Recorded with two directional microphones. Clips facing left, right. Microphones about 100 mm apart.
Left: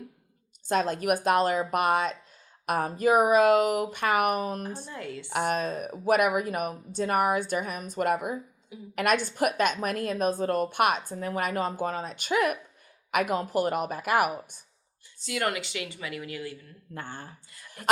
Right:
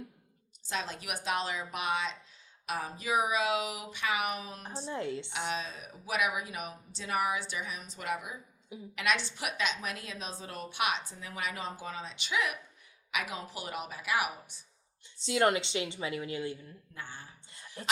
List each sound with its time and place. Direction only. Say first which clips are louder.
0.7 s a woman's voice: left 12 dB; 50° left (ahead or behind)
4.9 s a woman's voice: right 2 dB; 25° right (ahead or behind)
5.3 s a woman's voice: left 9 dB; 50° left (ahead or behind)
15.2 s a woman's voice: right 2 dB; 25° right (ahead or behind)
16.9 s a woman's voice: left 7 dB; 50° left (ahead or behind)